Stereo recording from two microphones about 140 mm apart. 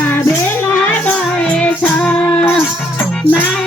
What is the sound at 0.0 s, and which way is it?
Music, 15° left (ahead or behind).